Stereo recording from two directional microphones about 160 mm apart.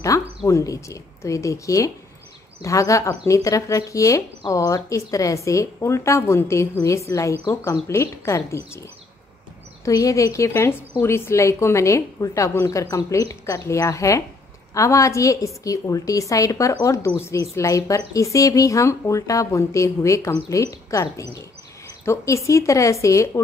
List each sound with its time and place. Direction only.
0.1 s a sound: 20° left (ahead or behind)
0.5 s speech: 20° left (ahead or behind)
9.8 s speech: 20° left (ahead or behind)